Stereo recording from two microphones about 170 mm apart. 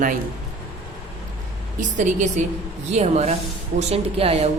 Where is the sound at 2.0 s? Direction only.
45° right (ahead or behind).